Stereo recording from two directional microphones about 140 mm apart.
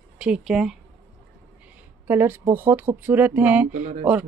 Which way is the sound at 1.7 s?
15° right (ahead or behind).